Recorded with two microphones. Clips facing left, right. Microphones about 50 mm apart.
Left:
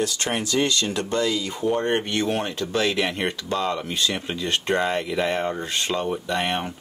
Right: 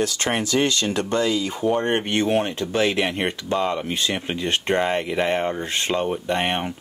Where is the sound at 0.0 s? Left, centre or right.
Right.